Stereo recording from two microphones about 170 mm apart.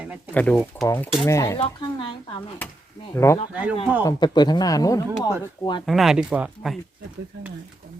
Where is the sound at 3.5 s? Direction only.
10° right (ahead or behind).